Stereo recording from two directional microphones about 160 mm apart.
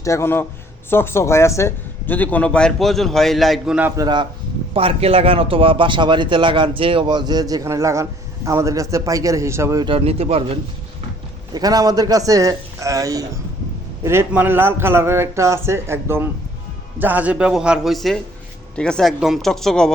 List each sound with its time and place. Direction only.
0.0 s speech: 20° left (ahead or behind); by 3.8 s centre (ahead or behind)
3.8 s a man's voice: 10° right (ahead or behind)
4.0 s a man's voice: 25° right (ahead or behind)
9.8 s a man's voice: 35° right (ahead or behind)
11.5 s a man's voice: 25° right (ahead or behind); by 19.9 s 5° left (ahead or behind)